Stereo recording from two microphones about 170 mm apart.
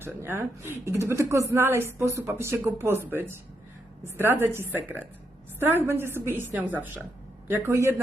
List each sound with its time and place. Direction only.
0.0 s speech: 15° right (ahead or behind)